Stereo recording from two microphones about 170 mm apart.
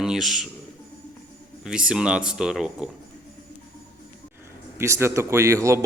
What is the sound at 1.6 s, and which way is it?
Speech, 5° right (ahead or behind).